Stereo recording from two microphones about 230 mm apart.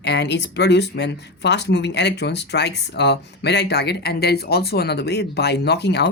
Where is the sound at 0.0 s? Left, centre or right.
Left.